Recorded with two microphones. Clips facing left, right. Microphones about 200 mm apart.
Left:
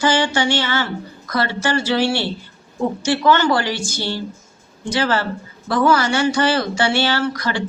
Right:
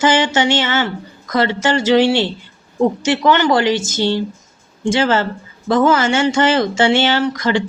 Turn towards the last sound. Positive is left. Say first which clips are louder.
# right 5 dB
turn(degrees=-20)  # may be behind; listen again after turning